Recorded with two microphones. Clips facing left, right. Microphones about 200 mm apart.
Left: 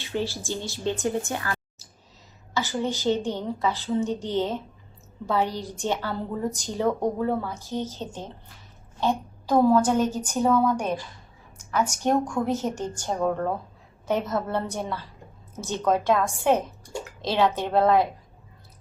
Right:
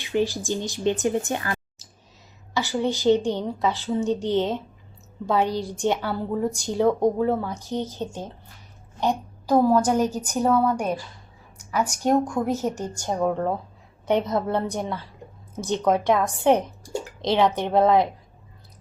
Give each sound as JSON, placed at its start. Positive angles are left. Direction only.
{"t": 0.0, "sound": "a woman's voice", "side_deg": -15}
{"t": 5.5, "sound": "a woman's voice", "side_deg": -15}
{"t": 11.5, "sound": "a sound", "side_deg": -10}
{"t": 12.0, "sound": "a woman's voice", "side_deg": -10}